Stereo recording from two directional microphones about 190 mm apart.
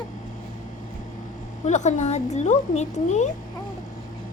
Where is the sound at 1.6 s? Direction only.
40° left (ahead or behind).